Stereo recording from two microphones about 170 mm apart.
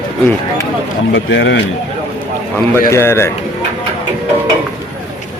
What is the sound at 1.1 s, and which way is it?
Speech, 90° left.